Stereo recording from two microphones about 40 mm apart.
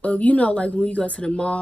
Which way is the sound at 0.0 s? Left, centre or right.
Left.